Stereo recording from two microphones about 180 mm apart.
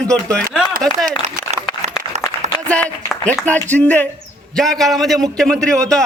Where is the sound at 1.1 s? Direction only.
45° right (ahead or behind).